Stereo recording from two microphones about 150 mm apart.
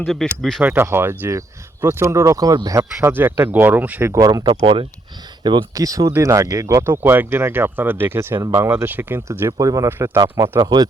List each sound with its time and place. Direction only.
0.1 s speech: 5° left (ahead or behind)
0.6 s speech: 15° right (ahead or behind)
4.4 s speech: 35° right (ahead or behind)